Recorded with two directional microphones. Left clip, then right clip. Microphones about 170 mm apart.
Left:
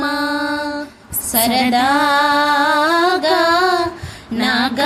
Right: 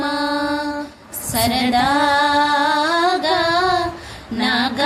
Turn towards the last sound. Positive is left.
turn(degrees=25)  # may be behind; listen again after turning